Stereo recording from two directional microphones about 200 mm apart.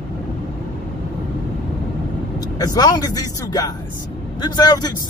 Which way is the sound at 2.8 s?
20° left (ahead or behind).